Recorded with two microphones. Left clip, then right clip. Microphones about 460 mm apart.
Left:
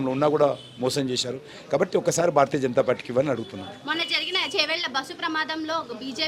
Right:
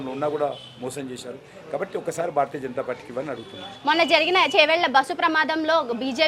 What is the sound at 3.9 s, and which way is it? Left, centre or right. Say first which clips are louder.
A woman's voice: right 7 dB; right.